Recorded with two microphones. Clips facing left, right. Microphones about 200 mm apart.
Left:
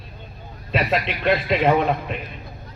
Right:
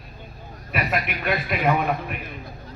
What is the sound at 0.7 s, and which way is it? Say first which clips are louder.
Speech: left 4 dB; 25° left (ahead or behind).